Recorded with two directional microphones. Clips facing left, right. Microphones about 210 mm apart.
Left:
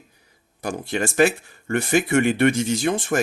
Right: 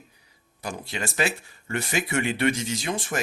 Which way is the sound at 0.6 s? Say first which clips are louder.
Left 7 dB; 50° left (ahead or behind).